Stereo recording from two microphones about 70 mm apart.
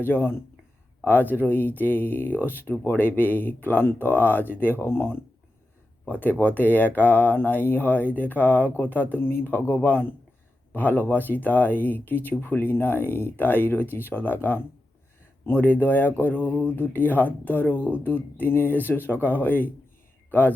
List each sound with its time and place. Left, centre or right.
0.0 s speech: left